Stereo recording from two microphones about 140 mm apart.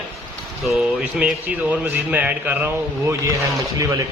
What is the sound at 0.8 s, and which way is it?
A man's voice, 10° right (ahead or behind).